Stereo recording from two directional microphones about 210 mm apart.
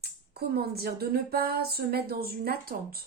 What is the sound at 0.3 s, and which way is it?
Speech, 50° right (ahead or behind).